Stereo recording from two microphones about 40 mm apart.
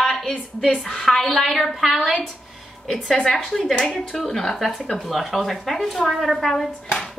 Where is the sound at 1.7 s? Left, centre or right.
Centre.